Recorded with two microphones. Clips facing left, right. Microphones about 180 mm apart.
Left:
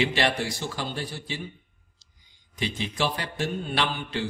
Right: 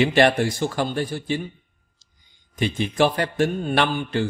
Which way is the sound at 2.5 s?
50° right (ahead or behind).